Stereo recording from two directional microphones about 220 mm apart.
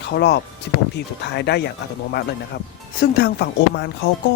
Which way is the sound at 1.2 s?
50° left (ahead or behind).